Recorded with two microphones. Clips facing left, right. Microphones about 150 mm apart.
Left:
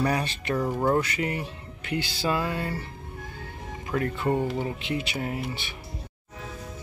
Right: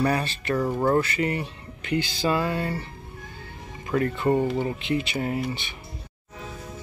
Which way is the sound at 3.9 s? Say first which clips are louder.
Right 4 dB; centre (ahead or behind).